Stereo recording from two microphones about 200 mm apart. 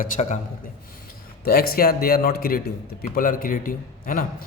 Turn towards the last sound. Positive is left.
turn(degrees=45)  # may be behind; listen again after turning